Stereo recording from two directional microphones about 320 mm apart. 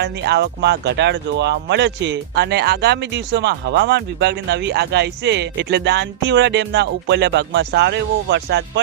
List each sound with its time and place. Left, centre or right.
0.0 s speech: right